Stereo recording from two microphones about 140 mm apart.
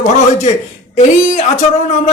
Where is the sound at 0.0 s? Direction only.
55° left (ahead or behind).